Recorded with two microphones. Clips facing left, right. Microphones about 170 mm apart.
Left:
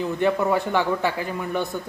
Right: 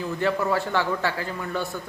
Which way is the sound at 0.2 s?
20° left (ahead or behind).